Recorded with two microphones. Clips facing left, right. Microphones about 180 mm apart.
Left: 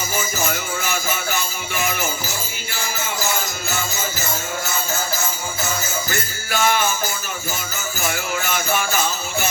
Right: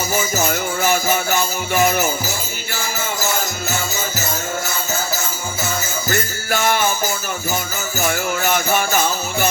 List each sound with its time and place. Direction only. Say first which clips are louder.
0.4 s music: right 6 dB; 45° right (ahead or behind)
6.1 s music: right 5 dB; 45° right (ahead or behind)
8.0 s music: right 5 dB; 45° right (ahead or behind)